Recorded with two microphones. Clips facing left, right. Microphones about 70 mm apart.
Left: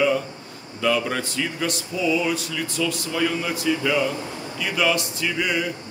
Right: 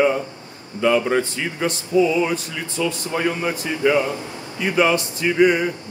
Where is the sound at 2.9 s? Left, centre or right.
Right.